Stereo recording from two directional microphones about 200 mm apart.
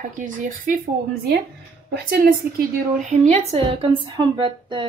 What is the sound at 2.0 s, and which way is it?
Speech, 50° right (ahead or behind).